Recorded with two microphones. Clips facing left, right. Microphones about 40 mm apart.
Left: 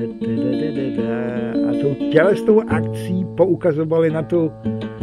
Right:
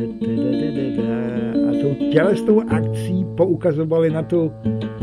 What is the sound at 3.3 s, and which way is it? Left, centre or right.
Speech, left.